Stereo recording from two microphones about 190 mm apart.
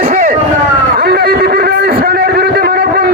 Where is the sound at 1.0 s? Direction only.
55° right (ahead or behind).